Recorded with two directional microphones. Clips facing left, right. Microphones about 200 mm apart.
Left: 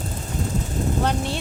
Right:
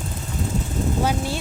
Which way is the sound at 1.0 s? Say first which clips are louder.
Right 2 dB; 5° right (ahead or behind).